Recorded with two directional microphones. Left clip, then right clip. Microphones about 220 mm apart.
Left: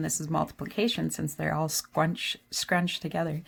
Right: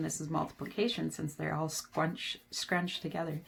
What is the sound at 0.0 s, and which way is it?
Speech, 45° left (ahead or behind).